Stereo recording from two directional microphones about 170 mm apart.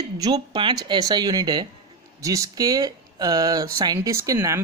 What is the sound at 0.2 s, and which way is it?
Speech, 25° right (ahead or behind).